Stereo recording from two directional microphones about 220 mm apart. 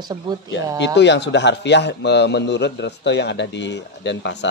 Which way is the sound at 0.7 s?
55° left (ahead or behind).